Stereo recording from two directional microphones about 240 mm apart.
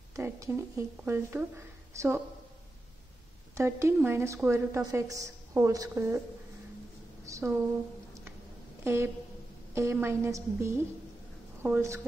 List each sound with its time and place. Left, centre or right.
0.1 s a woman's voice: centre
3.5 s a woman's voice: centre
7.2 s a woman's voice: centre
8.8 s a woman's voice: centre